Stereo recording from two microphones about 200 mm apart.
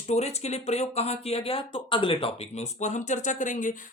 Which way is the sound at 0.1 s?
30° left (ahead or behind).